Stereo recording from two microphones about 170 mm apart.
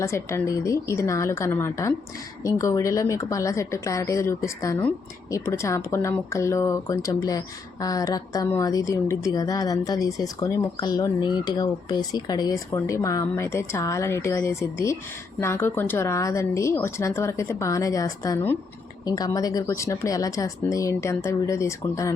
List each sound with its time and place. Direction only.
0.0 s speech: 15° left (ahead or behind)